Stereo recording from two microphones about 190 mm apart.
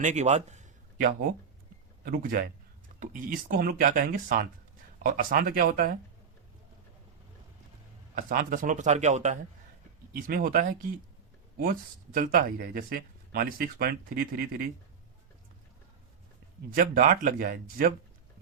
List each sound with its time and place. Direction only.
0.0 s a sound: 35° right (ahead or behind)
2.0 s speech: 50° right (ahead or behind)
8.1 s speech: 45° right (ahead or behind)
10.1 s speech: 50° right (ahead or behind)
16.7 s speech: 50° right (ahead or behind)